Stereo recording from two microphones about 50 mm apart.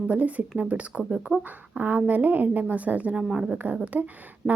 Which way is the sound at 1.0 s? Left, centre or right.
Centre.